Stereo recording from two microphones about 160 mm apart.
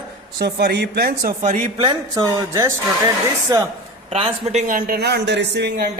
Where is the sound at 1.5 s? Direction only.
55° right (ahead or behind).